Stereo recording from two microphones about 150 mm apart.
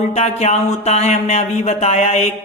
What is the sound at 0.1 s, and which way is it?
Speech, 45° left (ahead or behind).